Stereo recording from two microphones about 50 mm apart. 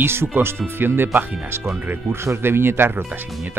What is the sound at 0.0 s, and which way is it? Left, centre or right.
Speech, right.